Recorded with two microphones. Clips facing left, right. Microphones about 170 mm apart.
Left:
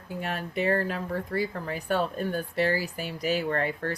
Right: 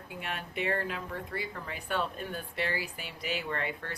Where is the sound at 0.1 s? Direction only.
40° left (ahead or behind).